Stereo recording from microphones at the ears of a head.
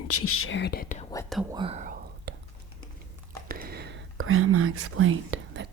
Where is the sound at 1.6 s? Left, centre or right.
Right.